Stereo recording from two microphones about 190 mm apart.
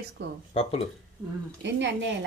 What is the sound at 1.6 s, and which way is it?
Speech, 70° right (ahead or behind).